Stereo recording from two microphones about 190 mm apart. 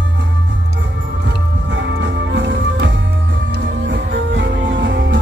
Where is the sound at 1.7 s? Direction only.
70° right (ahead or behind).